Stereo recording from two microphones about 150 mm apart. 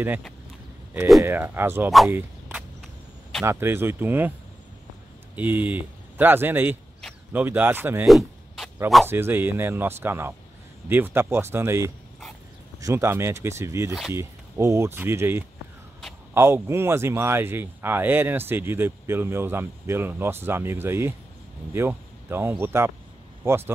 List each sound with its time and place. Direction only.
1.2 s speech: 15° right (ahead or behind)
2.0 s a sound: 15° right (ahead or behind)
3.4 s speech: 15° right (ahead or behind)
5.3 s speech: 10° right (ahead or behind)
8.1 s a sound: centre (ahead or behind)
9.0 s speech: 15° right (ahead or behind)